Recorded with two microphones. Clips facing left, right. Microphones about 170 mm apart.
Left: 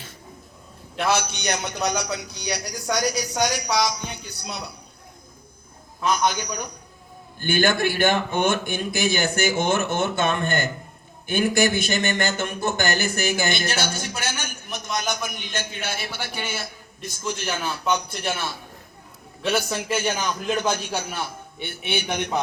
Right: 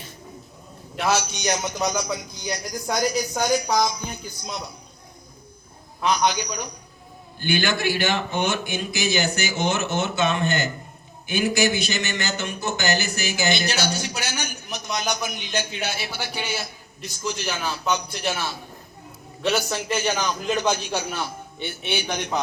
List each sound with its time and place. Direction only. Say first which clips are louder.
0.9 s a man's voice: even; 60° left (ahead or behind)
6.1 s speech: right 1 dB; 50° left (ahead or behind)
19.5 s a man's voice: even; 55° left (ahead or behind)